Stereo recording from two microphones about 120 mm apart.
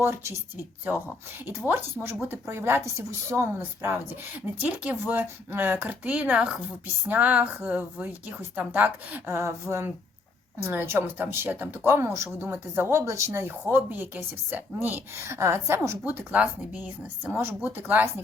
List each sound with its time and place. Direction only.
0.0 s speech: 20° right (ahead or behind)
1.5 s a woman's voice: 20° right (ahead or behind)